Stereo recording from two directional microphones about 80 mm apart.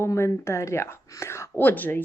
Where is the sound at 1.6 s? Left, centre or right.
Left.